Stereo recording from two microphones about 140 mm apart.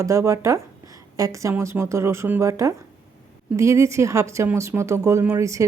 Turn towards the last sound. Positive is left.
turn(degrees=-20)  # may be behind; listen again after turning